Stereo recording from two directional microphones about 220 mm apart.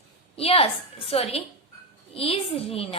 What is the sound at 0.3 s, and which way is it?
A woman's voice, 25° left (ahead or behind).